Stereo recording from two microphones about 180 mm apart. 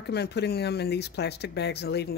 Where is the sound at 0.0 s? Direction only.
65° left (ahead or behind).